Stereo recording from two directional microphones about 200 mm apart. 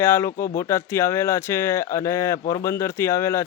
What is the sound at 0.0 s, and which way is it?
Speech, 10° left (ahead or behind).